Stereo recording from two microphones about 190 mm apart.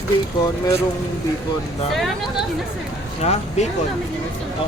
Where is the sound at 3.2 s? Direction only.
35° left (ahead or behind).